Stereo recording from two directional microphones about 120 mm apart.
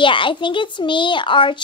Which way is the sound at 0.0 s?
45° left (ahead or behind).